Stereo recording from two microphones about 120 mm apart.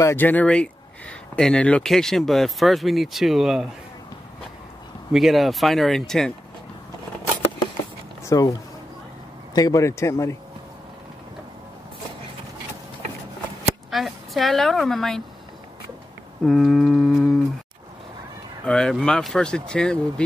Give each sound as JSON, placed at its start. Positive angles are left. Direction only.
{"t": 0.0, "sound": "speech", "side_deg": 15}
{"t": 5.1, "sound": "speech", "side_deg": 0}
{"t": 8.3, "sound": "speech", "side_deg": 30}
{"t": 13.8, "sound": "a woman's voice", "side_deg": 0}
{"t": 16.4, "sound": "speech", "side_deg": 0}
{"t": 18.7, "sound": "speech", "side_deg": 5}